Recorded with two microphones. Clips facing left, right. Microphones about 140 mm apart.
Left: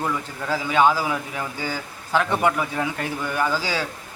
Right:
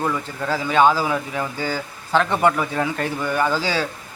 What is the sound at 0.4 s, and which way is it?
A man's voice, 10° left (ahead or behind).